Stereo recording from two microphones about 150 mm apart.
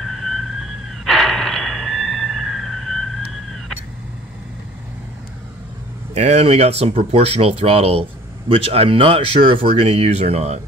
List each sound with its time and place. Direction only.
0.0 s emergency vehicle: centre (ahead or behind)
6.1 s speech: 45° right (ahead or behind)